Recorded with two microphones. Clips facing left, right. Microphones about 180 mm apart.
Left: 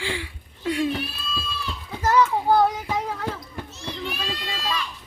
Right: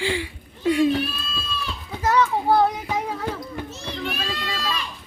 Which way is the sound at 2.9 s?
15° right (ahead or behind).